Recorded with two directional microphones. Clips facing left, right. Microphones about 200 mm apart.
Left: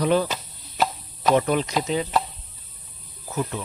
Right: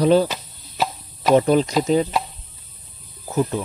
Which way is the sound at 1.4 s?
35° right (ahead or behind).